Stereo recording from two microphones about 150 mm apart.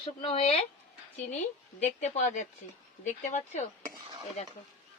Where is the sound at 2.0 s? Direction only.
50° left (ahead or behind).